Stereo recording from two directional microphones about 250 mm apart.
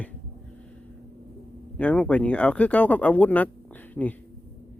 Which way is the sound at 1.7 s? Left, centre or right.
Centre.